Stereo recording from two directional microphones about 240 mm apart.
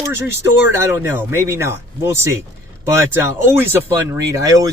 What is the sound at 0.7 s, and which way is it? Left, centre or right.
Speech, centre.